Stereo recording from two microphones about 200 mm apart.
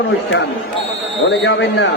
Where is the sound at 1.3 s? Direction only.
65° left (ahead or behind).